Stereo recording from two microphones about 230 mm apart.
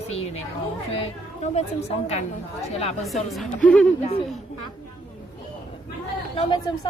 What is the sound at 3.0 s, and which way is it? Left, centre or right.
Speech, centre.